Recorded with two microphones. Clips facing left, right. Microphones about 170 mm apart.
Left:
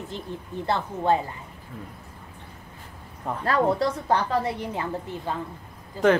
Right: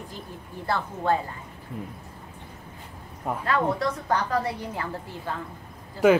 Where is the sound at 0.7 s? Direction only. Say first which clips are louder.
Left 2 dB; 20° left (ahead or behind).